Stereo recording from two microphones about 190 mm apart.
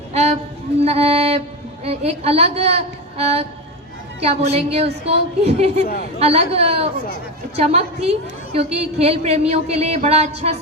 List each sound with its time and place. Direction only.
0.1 s music: 35° right (ahead or behind)
1.8 s a woman's voice: 30° right (ahead or behind)
5.8 s a woman's voice: 50° left (ahead or behind)
6.1 s a woman's voice: 30° right (ahead or behind)